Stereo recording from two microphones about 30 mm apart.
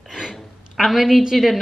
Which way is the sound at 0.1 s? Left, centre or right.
Right.